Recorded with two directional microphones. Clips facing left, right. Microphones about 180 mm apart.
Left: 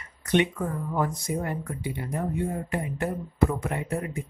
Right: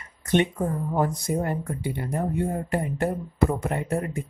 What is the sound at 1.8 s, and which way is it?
Speech, 60° right (ahead or behind).